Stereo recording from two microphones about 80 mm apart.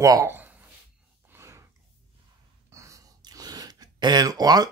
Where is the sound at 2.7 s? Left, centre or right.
Right.